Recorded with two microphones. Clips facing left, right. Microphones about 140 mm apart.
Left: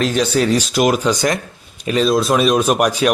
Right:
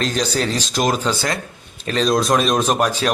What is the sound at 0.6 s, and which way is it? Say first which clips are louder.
Speech: left 4 dB; 10° left (ahead or behind).